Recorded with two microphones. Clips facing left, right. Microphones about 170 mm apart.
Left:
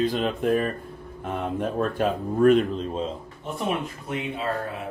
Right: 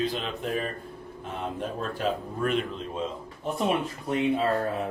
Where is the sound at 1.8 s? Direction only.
55° left (ahead or behind).